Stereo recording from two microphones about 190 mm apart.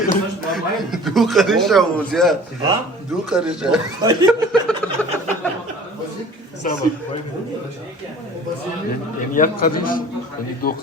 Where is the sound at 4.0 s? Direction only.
20° right (ahead or behind).